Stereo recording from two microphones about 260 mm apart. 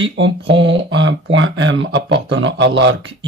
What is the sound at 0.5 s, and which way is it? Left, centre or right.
Speech, right.